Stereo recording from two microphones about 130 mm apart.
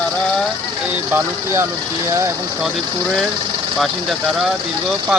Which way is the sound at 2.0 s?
20° right (ahead or behind).